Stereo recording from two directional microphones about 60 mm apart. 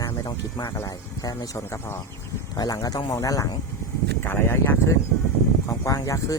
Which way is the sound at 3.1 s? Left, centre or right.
Left.